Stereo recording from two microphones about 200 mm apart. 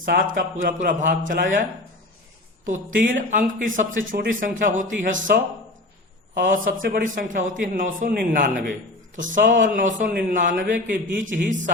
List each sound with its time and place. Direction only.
0.0 s a man's voice: 45° right (ahead or behind)
2.6 s speech: 40° right (ahead or behind)
6.4 s a man's voice: 40° right (ahead or behind)